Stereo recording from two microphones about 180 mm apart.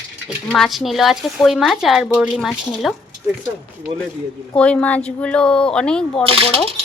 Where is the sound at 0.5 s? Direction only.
Centre (ahead or behind).